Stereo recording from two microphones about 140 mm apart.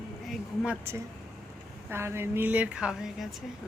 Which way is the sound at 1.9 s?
20° right (ahead or behind).